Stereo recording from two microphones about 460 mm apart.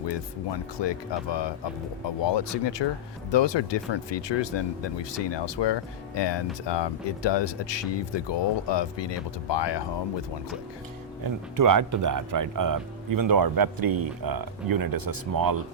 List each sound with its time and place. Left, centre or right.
0.0 s speech: left
11.2 s speech: right